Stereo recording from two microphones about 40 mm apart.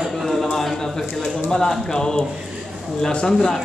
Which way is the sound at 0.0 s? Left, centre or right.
Centre.